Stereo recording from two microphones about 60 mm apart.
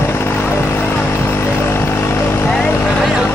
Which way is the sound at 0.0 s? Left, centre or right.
Left.